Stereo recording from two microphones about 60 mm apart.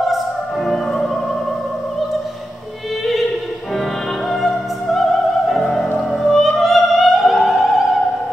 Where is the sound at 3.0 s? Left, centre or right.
Centre.